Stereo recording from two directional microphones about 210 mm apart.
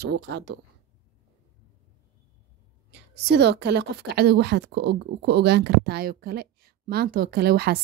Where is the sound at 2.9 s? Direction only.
50° right (ahead or behind).